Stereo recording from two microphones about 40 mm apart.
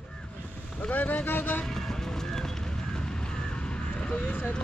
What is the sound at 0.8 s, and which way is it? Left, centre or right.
Vehicle, left.